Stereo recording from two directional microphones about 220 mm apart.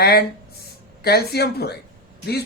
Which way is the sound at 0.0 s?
45° left (ahead or behind).